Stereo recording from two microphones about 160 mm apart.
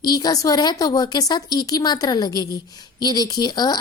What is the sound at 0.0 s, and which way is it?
A woman's voice, 25° left (ahead or behind).